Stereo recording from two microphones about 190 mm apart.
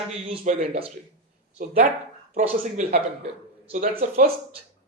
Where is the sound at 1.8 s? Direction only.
45° right (ahead or behind).